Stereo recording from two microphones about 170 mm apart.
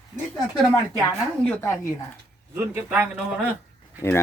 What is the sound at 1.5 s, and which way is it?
Speech, 15° left (ahead or behind).